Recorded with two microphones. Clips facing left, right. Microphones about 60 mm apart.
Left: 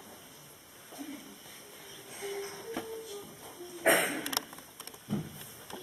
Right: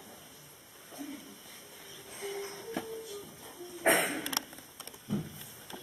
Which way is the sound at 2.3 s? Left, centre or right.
Centre.